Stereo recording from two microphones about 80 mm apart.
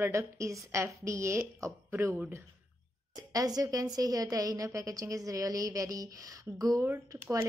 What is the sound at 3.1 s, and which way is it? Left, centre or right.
A woman's voice, right.